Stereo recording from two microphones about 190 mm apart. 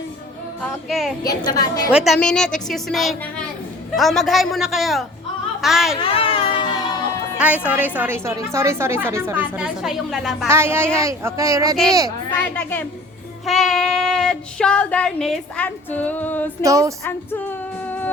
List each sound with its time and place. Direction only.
0.6 s child singing: centre (ahead or behind)
1.2 s a woman's voice: 20° left (ahead or behind)
1.9 s child singing: 5° right (ahead or behind)
6.0 s a sound: 30° left (ahead or behind)
7.3 s a woman's voice: 5° right (ahead or behind)
10.5 s a woman's voice: 10° right (ahead or behind)
13.4 s child singing: centre (ahead or behind)
16.6 s a woman's voice: 15° right (ahead or behind)
17.0 s female singing: 10° left (ahead or behind)
17.8 s a sound: 10° left (ahead or behind)